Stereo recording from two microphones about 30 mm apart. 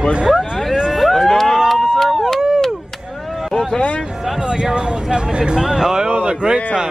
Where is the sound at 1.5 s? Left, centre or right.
Centre.